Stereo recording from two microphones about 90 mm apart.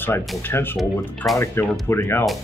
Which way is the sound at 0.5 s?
25° left (ahead or behind).